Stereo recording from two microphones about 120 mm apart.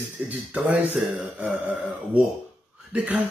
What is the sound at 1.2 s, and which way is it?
Speech, centre (ahead or behind).